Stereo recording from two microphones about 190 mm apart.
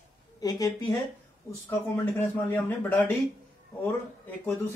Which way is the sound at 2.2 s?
10° left (ahead or behind).